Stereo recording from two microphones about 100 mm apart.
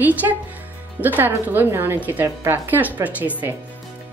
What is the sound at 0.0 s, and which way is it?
A woman's voice, 15° right (ahead or behind).